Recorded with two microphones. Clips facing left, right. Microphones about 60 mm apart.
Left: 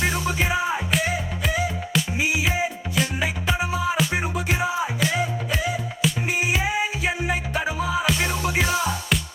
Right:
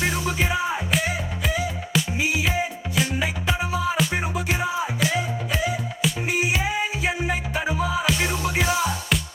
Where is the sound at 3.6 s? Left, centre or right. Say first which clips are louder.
Right 1 dB; left.